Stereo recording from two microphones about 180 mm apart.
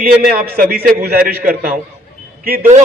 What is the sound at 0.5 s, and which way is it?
A man's voice, 55° right (ahead or behind).